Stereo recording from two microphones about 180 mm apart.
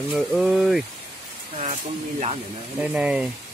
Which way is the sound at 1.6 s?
40° right (ahead or behind).